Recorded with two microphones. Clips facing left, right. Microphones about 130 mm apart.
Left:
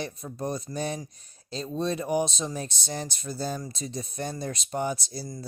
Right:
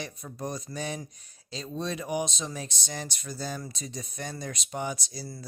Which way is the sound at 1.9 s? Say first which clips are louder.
Left 4 dB; 35° left (ahead or behind).